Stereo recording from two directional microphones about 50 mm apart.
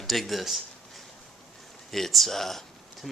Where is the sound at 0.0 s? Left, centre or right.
Centre.